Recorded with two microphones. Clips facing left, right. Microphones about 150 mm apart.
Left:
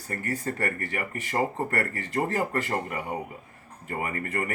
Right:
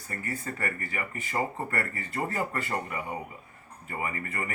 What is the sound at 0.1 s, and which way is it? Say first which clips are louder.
Speech: left 5 dB; 45° left (ahead or behind).